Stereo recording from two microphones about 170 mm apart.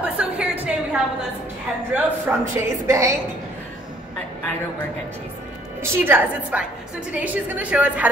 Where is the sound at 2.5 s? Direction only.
15° right (ahead or behind).